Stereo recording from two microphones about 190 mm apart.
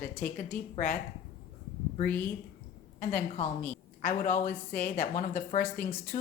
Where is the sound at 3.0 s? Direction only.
40° left (ahead or behind).